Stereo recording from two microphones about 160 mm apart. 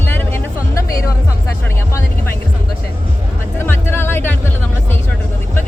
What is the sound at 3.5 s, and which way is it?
Music, 15° left (ahead or behind).